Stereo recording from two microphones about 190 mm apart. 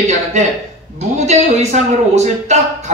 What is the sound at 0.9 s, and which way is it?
A man's voice, 35° right (ahead or behind).